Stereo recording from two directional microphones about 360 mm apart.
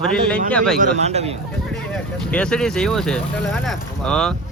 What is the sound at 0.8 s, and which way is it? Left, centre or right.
Speech, centre.